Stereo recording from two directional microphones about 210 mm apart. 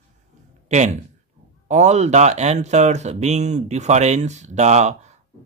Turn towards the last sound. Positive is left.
turn(degrees=-30)  # may be behind; listen again after turning